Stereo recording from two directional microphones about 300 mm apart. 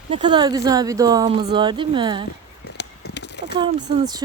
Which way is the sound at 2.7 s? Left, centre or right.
Left.